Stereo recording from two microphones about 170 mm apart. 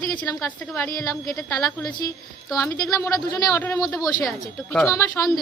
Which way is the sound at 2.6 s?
20° left (ahead or behind).